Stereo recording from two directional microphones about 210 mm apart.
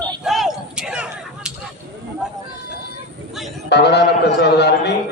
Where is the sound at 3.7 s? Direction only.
50° left (ahead or behind).